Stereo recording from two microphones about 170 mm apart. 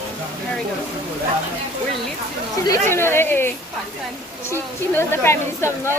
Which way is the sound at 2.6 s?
15° left (ahead or behind).